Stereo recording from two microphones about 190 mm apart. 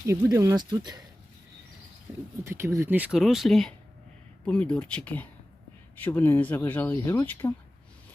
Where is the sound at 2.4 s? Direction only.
15° right (ahead or behind); by 7.5 s 10° left (ahead or behind).